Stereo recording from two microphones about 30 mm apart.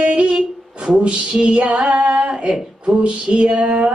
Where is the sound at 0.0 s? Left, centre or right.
Right.